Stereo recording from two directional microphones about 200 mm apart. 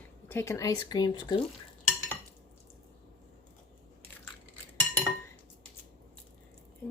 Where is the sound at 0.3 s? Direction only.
10° left (ahead or behind).